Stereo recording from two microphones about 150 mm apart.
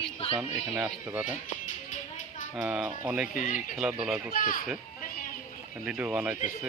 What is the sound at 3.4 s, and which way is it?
Speech, 65° left (ahead or behind).